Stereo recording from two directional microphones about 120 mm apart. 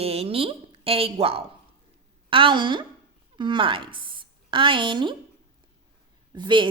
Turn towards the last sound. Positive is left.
turn(degrees=-40)  # may be behind; listen again after turning